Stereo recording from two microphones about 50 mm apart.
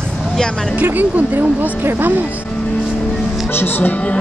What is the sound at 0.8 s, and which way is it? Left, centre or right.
Speech, right.